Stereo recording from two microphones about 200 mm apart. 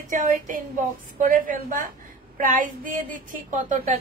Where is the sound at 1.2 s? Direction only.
40° right (ahead or behind).